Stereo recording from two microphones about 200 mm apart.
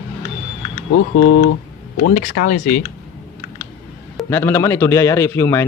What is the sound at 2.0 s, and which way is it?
Speech, 50° left (ahead or behind).